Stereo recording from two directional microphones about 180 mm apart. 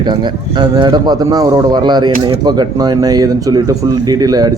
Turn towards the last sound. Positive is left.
turn(degrees=-20)  # may be behind; listen again after turning